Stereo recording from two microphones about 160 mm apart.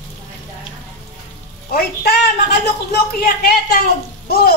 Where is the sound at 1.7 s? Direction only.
80° left.